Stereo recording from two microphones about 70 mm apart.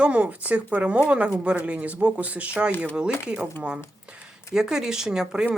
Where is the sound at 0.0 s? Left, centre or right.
Right.